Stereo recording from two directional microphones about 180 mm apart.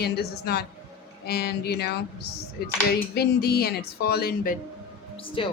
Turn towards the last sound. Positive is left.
turn(degrees=30)  # may be behind; listen again after turning